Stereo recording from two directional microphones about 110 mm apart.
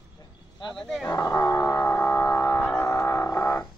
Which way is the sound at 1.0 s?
35° left (ahead or behind).